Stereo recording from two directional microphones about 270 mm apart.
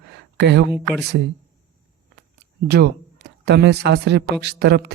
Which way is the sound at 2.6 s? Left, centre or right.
Right.